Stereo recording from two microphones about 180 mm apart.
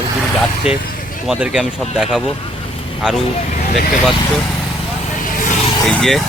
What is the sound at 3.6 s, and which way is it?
Speech, 55° left (ahead or behind).